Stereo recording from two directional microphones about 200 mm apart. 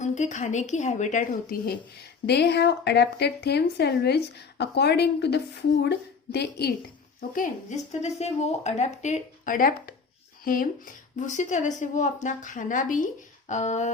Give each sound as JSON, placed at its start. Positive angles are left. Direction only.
{"t": 0.0, "sound": "speech", "side_deg": 35}
{"t": 2.2, "sound": "speech", "side_deg": 55}
{"t": 7.2, "sound": "speech", "side_deg": 45}